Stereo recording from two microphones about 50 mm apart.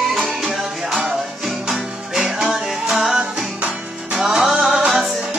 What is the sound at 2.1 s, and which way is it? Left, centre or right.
Music, centre.